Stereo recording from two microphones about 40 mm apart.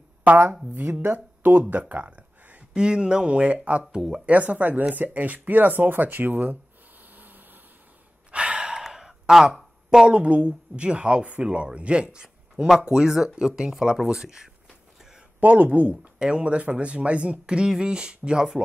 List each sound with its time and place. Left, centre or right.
0.3 s speech: right
1.0 s speech: right
1.7 s a sound: right
2.7 s speech: right
3.9 s speech: centre
4.3 s speech: right
7.1 s a sound: right
8.3 s gasp: right
8.8 s a sound: centre
9.8 s speech: right
15.4 s speech: right
16.2 s speech: right